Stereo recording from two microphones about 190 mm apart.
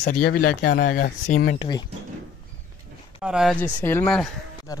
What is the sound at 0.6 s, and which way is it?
Speech, 60° left (ahead or behind).